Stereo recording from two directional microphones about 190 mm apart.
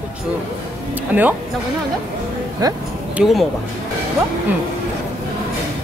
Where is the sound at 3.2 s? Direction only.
Centre (ahead or behind).